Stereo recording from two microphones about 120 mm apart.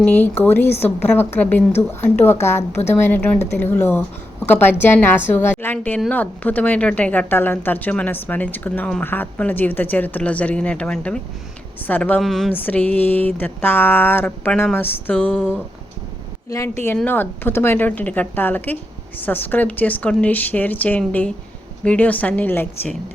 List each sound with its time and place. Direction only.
0.0 s speech: 15° left (ahead or behind)
12.2 s speech: centre (ahead or behind)
12.5 s speech: 15° left (ahead or behind)
16.6 s speech: 20° left (ahead or behind)